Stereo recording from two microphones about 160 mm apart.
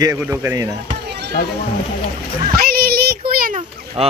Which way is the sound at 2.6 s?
75° right (ahead or behind).